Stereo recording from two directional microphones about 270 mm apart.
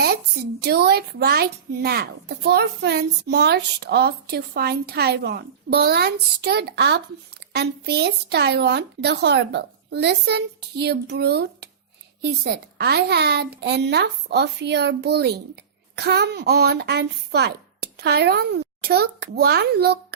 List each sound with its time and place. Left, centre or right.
0.6 s a child's voice: right